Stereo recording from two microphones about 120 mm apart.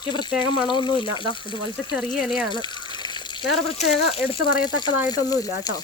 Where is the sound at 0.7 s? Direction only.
40° left (ahead or behind).